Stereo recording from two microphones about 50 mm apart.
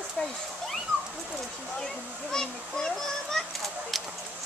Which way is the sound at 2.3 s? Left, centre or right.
Centre.